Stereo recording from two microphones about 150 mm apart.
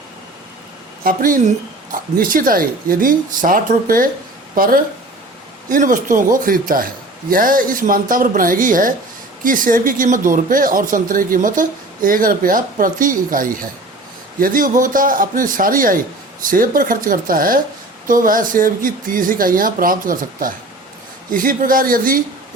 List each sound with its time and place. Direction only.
1.0 s a woman's voice: 65° right (ahead or behind)